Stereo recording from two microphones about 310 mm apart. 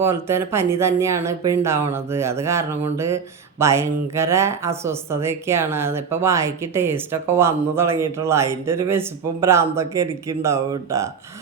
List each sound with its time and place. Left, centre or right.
0.0 s speech: centre